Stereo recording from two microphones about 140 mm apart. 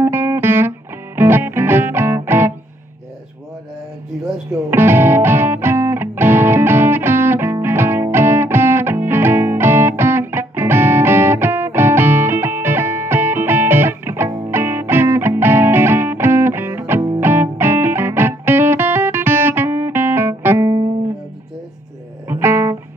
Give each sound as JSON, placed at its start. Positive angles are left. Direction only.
{"t": 0.0, "sound": "music", "side_deg": -15}
{"t": 4.5, "sound": "music", "side_deg": -15}
{"t": 22.3, "sound": "music", "side_deg": -15}